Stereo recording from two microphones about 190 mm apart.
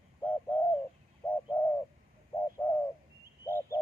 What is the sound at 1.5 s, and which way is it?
Bird, 10° left (ahead or behind).